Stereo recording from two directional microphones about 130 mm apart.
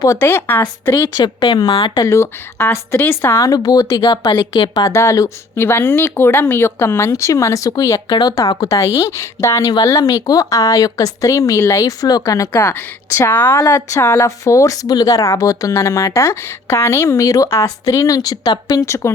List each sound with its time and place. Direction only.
0.0 s a woman's voice: 20° left (ahead or behind)
0.9 s speech: 30° left (ahead or behind)
2.0 s speech: 20° left (ahead or behind); by 4.7 s 40° left (ahead or behind)
4.7 s a woman's voice: 25° left (ahead or behind)
13.6 s speech: 25° left (ahead or behind)